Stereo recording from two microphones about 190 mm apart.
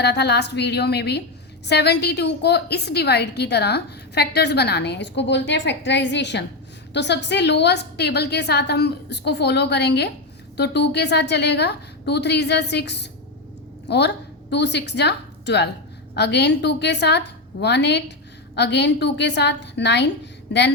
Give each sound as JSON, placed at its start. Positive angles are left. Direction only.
{"t": 0.0, "sound": "a woman's voice", "side_deg": 60}
{"t": 14.5, "sound": "a woman's voice", "side_deg": 65}